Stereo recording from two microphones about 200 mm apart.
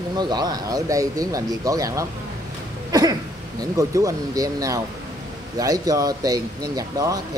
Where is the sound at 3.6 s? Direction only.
15° right (ahead or behind).